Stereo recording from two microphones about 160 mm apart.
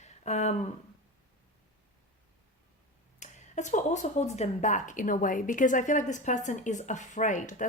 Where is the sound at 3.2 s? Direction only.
50° left (ahead or behind).